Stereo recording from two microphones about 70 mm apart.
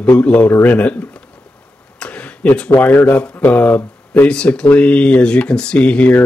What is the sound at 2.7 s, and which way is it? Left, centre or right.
Speech, left.